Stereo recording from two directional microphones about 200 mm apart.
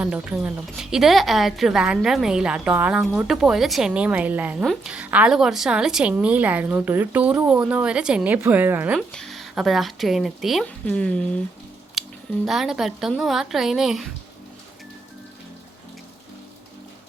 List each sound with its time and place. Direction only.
0.0 s a woman's voice: 5° right (ahead or behind)
12.0 s a sound: centre (ahead or behind)
12.5 s a woman's voice: centre (ahead or behind)